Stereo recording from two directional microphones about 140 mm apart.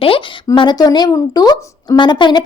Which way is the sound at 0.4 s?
30° left (ahead or behind).